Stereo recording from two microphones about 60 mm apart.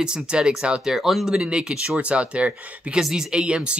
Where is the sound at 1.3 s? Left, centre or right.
Centre.